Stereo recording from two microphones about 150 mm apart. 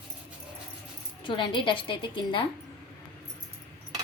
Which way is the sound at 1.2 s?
35° left (ahead or behind).